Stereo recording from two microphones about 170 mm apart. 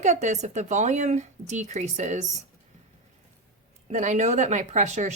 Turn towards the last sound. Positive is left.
turn(degrees=-45)  # may be behind; listen again after turning